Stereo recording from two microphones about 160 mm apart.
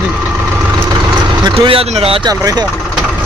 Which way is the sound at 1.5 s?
35° right (ahead or behind).